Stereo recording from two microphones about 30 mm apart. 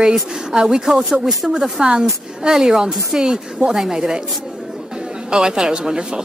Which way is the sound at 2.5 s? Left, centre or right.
Centre.